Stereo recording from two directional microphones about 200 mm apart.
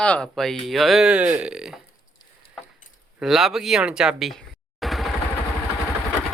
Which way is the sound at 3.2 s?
Centre (ahead or behind).